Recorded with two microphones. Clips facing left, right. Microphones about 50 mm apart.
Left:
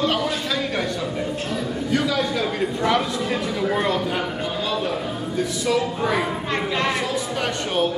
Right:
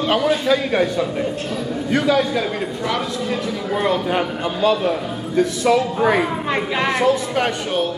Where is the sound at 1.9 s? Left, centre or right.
Right.